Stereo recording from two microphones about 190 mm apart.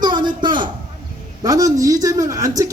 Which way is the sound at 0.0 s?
25° right (ahead or behind).